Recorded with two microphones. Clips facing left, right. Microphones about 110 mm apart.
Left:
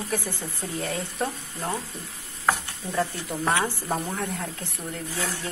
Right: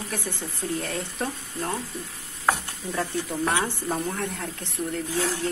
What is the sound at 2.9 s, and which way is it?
Speech, centre (ahead or behind).